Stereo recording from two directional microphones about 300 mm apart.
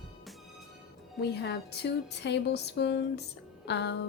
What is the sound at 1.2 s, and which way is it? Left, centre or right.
A woman's voice, left.